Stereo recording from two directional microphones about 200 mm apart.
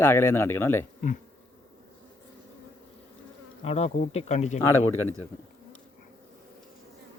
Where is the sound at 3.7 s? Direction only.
30° left (ahead or behind).